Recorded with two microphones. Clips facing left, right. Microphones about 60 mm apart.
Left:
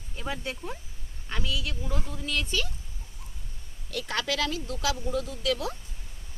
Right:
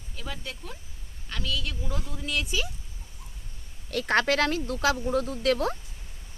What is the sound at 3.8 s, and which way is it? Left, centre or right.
Speech, right.